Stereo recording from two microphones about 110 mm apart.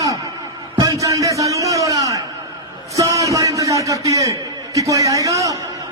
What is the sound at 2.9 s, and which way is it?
A man's voice, 30° right (ahead or behind).